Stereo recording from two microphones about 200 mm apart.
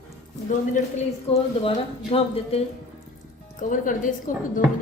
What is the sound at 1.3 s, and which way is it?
Speech, 30° left (ahead or behind).